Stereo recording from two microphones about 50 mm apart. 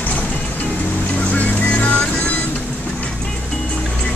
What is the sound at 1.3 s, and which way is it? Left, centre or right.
Music, left.